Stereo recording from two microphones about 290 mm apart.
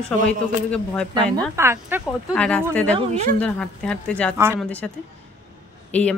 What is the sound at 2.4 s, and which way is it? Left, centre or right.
Speech, centre.